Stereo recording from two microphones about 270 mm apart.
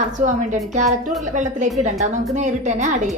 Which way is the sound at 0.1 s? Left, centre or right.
Right.